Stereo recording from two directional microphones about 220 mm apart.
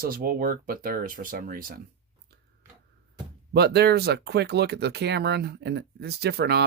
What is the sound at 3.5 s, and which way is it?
Speech, 45° right (ahead or behind).